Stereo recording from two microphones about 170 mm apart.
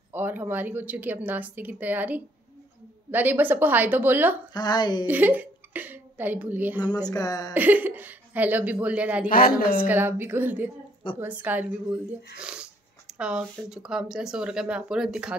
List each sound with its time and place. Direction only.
0.1 s speech: 10° right (ahead or behind)
4.6 s speech: 25° left (ahead or behind)
5.0 s a woman's voice: 10° right (ahead or behind)
6.8 s speech: 25° left (ahead or behind)
7.5 s speech: 10° right (ahead or behind)
9.3 s a woman's voice: 55° left (ahead or behind)
9.8 s speech: 10° right (ahead or behind)